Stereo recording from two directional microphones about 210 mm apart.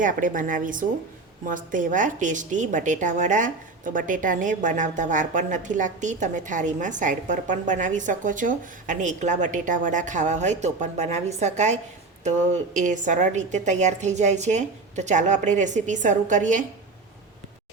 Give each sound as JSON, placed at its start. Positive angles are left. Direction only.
{"t": 0.0, "sound": "a woman's voice", "side_deg": -40}